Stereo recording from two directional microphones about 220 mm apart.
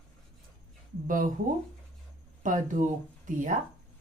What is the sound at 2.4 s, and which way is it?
Speech, 35° right (ahead or behind).